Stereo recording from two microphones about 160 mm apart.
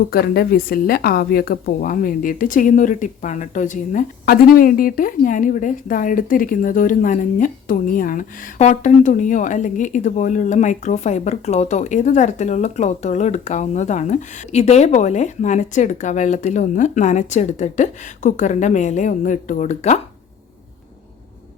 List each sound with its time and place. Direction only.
0.1 s a woman's voice: 75° left (ahead or behind); by 20.0 s 45° left (ahead or behind)